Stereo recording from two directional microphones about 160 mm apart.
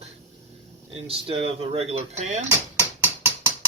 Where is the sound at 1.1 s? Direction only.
35° right (ahead or behind).